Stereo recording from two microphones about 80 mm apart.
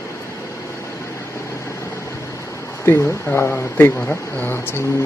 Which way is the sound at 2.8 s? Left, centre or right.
Left.